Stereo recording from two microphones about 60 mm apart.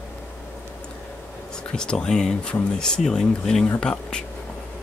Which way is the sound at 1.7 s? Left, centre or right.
Centre.